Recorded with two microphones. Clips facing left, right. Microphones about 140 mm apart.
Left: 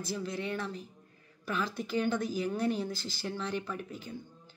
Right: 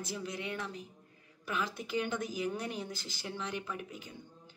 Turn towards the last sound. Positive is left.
turn(degrees=-15)  # may be behind; listen again after turning